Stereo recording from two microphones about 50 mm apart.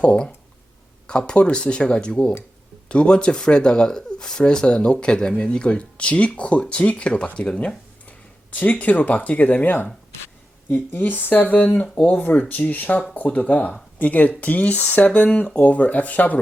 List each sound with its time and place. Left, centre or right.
0.0 s speech: left
1.3 s speech: left
8.5 s speech: left
10.9 s speech: left
15.3 s speech: left